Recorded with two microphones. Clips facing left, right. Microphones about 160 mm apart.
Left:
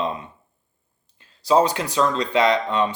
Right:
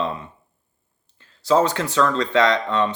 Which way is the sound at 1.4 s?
15° left (ahead or behind).